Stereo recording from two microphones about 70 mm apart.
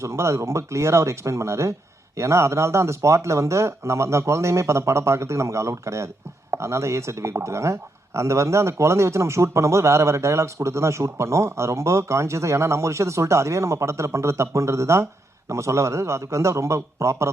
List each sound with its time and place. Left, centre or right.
0.0 s speech: right